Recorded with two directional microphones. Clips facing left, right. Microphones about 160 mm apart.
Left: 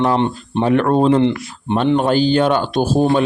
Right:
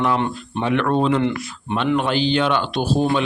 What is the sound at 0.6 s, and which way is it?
Speech, 40° left (ahead or behind).